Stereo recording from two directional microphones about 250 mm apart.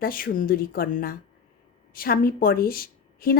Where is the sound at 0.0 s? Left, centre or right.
Left.